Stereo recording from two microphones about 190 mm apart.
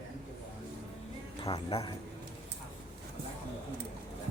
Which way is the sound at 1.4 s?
25° left (ahead or behind).